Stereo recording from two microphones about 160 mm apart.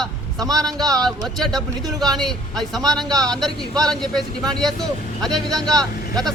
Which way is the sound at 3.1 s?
25° right (ahead or behind).